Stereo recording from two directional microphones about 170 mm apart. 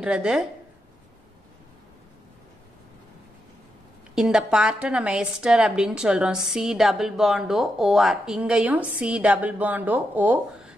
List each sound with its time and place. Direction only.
0.0 s a woman's voice: 5° right (ahead or behind)
4.1 s a woman's voice: 5° right (ahead or behind)